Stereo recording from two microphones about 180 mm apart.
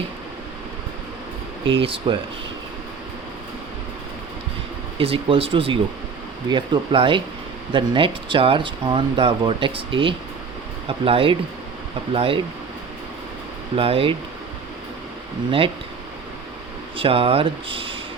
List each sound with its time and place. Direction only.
1.7 s speech: 30° right (ahead or behind)
4.9 s speech: 30° right (ahead or behind)
13.7 s speech: 30° right (ahead or behind)
17.0 s speech: 30° right (ahead or behind)